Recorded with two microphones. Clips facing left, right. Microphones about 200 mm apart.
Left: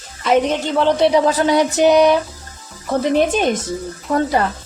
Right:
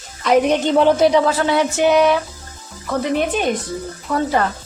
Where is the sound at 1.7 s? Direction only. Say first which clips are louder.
Left 3 dB; 35° left (ahead or behind).